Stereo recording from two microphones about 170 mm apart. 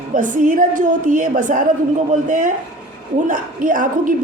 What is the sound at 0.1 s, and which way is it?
A man's voice, 50° right (ahead or behind).